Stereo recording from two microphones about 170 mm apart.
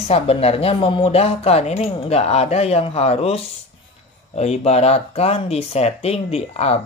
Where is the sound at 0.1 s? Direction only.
35° left (ahead or behind).